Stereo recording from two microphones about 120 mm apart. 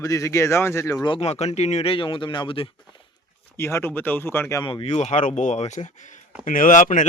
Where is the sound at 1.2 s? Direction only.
60° left (ahead or behind).